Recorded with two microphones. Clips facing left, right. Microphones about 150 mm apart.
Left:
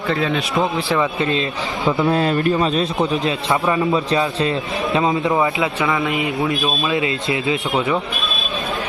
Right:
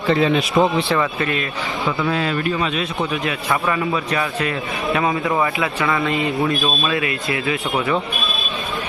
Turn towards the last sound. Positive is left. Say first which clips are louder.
# left 1 dB
turn(degrees=25)  # may be behind; listen again after turning